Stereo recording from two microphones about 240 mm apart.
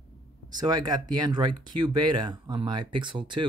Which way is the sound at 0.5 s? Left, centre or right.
Centre.